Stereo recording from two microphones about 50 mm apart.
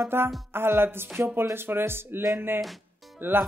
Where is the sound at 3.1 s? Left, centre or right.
Right.